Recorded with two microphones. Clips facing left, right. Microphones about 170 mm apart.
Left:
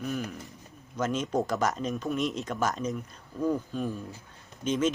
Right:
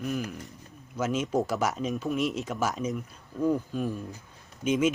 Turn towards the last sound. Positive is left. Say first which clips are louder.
# right 2 dB
turn(degrees=-10)  # may be behind; listen again after turning